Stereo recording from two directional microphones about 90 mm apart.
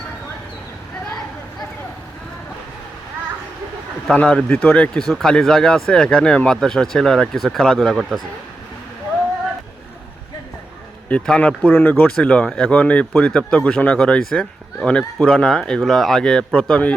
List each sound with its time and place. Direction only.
4.2 s speech: 15° left (ahead or behind)
11.1 s speech: 15° left (ahead or behind)